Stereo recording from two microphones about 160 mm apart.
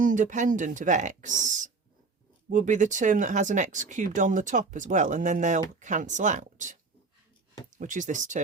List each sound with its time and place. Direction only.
0.0 s speech: 55° right (ahead or behind)